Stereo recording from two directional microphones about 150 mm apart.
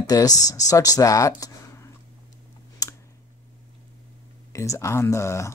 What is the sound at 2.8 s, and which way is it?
Clicking, 25° left (ahead or behind).